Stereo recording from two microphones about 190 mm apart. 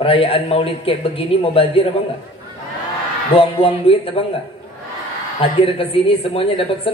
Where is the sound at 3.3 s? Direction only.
30° left (ahead or behind).